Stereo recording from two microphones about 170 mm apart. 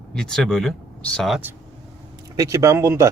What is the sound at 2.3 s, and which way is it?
Speech, 15° right (ahead or behind).